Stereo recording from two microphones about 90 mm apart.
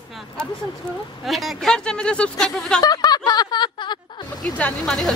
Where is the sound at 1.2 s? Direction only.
Centre (ahead or behind).